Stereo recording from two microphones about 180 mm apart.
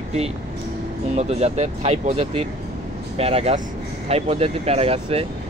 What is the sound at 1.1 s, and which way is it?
Speech, 35° right (ahead or behind).